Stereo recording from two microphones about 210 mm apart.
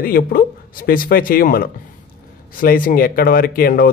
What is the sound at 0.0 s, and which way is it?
Speech, 45° left (ahead or behind).